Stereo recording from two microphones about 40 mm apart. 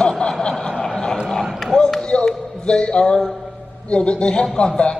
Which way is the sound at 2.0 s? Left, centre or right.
Left.